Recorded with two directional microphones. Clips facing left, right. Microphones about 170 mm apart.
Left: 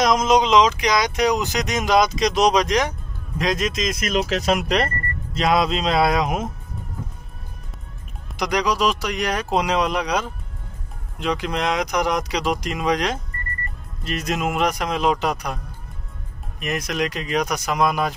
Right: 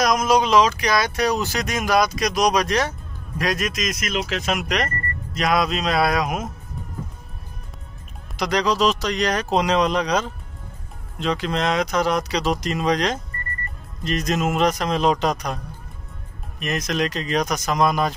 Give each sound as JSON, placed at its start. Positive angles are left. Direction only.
{"t": 0.0, "sound": "speech", "side_deg": 25}
{"t": 4.1, "sound": "speech", "side_deg": 40}
{"t": 8.4, "sound": "speech", "side_deg": 15}